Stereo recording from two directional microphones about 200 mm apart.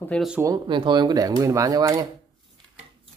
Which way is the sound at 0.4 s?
20° right (ahead or behind).